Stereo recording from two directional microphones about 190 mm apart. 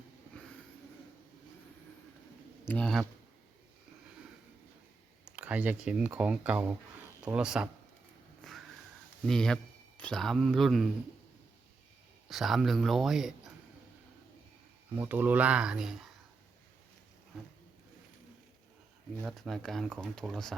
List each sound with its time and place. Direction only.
2.6 s speech: 5° left (ahead or behind)
5.4 s speech: 5° right (ahead or behind)
8.4 s sniff: 5° left (ahead or behind)
9.2 s speech: 5° left (ahead or behind)
12.3 s speech: centre (ahead or behind)
14.9 s speech: 10° right (ahead or behind)
19.2 s speech: centre (ahead or behind)